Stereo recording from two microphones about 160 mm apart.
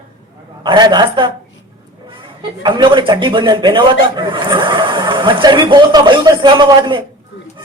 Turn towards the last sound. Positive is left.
turn(degrees=-30)  # may be behind; listen again after turning